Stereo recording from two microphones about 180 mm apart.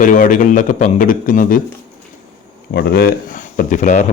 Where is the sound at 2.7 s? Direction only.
65° left (ahead or behind); by 4.1 s 45° left (ahead or behind).